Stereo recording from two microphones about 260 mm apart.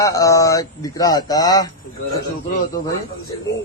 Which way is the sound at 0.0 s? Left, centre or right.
Centre.